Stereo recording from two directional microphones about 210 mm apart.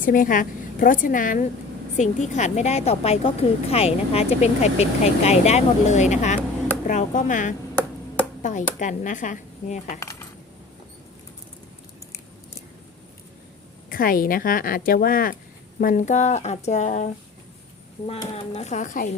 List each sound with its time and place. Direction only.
0.0 s a woman's voice: 40° left (ahead or behind)
10.0 s cutlery: 15° left (ahead or behind)
13.9 s a woman's voice: 40° left (ahead or behind)